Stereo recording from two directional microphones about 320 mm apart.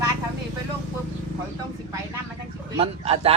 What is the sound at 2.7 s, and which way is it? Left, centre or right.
Speech, centre.